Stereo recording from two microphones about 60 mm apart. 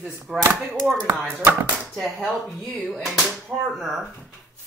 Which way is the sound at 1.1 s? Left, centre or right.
Right.